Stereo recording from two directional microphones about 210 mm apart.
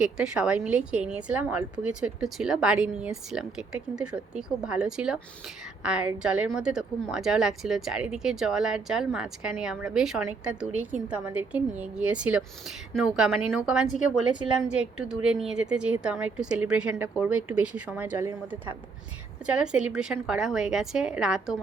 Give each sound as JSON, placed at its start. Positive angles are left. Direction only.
{"t": 0.0, "sound": "a woman's voice", "side_deg": -5}
{"t": 11.8, "sound": "a woman's voice", "side_deg": -5}